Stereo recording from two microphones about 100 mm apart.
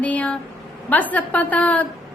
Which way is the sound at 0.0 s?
15° left (ahead or behind).